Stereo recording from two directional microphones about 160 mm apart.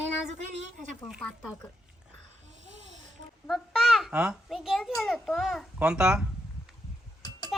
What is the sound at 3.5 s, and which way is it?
A child's voice, centre (ahead or behind).